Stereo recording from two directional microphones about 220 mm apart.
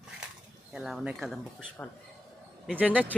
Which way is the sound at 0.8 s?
5° right (ahead or behind).